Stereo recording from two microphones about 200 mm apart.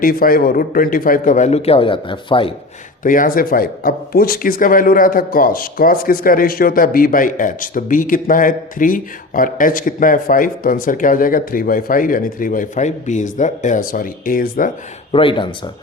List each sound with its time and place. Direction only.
0.0 s a man's voice: 45° left (ahead or behind); by 2.5 s 25° left (ahead or behind)
3.0 s a man's voice: 40° left (ahead or behind)
15.1 s speech: 25° left (ahead or behind)